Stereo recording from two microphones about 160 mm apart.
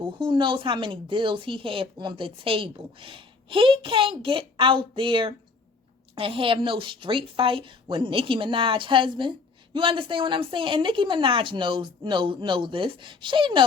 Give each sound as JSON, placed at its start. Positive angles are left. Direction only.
{"t": 0.0, "sound": "speech", "side_deg": -30}